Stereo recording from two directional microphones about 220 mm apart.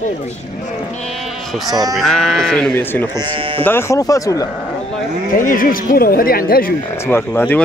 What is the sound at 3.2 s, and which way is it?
Speech, 20° right (ahead or behind).